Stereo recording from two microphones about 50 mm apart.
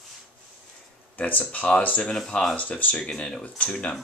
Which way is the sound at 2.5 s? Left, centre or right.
Left.